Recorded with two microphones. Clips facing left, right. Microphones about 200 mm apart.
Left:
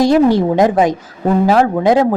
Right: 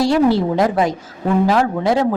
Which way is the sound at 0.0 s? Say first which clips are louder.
Left 4 dB; 15° left (ahead or behind).